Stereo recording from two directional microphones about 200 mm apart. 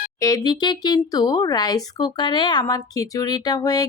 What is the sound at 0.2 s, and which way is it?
A woman's voice, 15° left (ahead or behind).